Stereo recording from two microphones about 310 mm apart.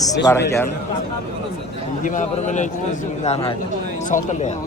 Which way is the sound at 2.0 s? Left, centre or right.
Left.